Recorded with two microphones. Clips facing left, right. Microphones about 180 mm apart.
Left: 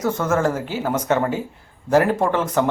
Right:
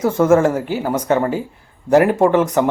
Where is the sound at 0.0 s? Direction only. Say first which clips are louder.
Right 7 dB; 30° right (ahead or behind).